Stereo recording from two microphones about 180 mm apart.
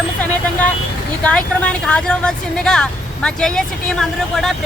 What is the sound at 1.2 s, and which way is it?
Speech, 5° left (ahead or behind).